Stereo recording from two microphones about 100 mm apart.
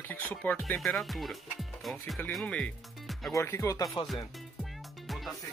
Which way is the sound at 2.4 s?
10° left (ahead or behind).